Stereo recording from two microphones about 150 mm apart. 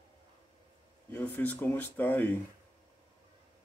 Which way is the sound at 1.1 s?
10° left (ahead or behind).